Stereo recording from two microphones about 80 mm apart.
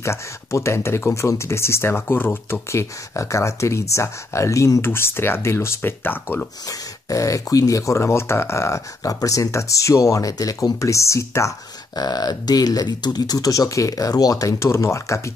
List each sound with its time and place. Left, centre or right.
0.0 s speech: left
2.7 s speech: left
7.1 s speech: left
12.0 s speech: left